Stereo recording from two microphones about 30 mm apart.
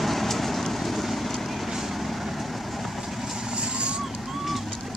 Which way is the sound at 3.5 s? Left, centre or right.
Right.